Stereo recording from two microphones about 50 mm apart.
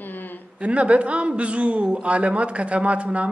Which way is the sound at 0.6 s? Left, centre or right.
Right.